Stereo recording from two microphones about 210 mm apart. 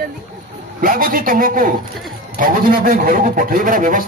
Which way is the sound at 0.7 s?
40° right (ahead or behind).